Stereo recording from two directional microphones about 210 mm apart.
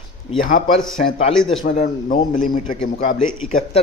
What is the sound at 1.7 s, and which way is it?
A man's voice, 35° left (ahead or behind).